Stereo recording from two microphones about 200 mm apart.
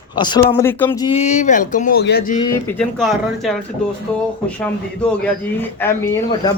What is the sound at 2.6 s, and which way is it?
Speech, 5° left (ahead or behind).